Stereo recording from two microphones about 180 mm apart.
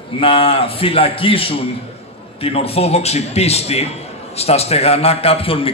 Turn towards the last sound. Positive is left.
turn(degrees=30)  # may be behind; listen again after turning